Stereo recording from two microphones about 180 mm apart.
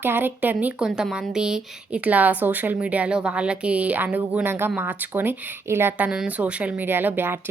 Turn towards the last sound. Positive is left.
turn(degrees=-10)  # may be behind; listen again after turning